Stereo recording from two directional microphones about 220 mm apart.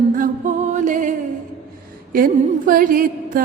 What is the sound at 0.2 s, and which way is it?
Music, 35° right (ahead or behind).